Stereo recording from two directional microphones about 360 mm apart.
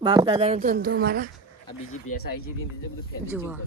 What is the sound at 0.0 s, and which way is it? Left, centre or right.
A woman's voice, centre.